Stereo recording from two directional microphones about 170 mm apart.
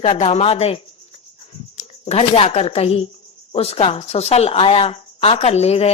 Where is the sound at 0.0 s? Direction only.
40° left (ahead or behind).